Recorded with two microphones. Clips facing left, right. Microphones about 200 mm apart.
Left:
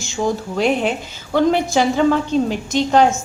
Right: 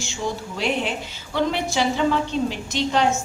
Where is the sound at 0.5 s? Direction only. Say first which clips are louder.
Left 6 dB; 45° left (ahead or behind).